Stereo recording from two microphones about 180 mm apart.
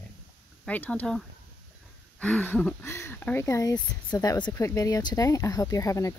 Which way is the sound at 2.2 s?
10° left (ahead or behind).